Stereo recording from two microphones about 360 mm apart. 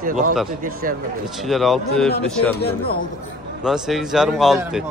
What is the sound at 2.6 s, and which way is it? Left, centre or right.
Speech, left.